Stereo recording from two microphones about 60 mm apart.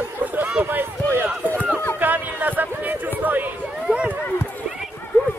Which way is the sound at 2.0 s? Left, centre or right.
Right.